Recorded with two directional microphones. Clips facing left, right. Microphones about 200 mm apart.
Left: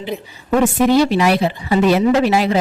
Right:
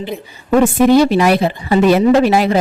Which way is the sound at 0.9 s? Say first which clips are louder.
Right 3 dB; 50° right (ahead or behind).